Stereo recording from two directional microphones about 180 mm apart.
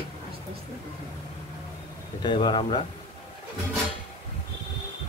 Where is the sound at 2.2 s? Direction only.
25° left (ahead or behind).